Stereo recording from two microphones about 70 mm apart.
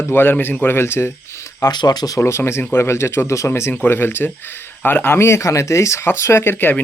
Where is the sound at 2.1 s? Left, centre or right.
Left.